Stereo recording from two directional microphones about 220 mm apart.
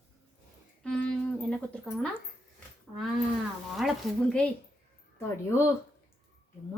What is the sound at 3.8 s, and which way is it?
Speech, centre (ahead or behind).